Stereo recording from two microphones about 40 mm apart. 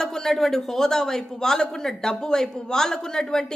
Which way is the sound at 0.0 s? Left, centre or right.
Centre.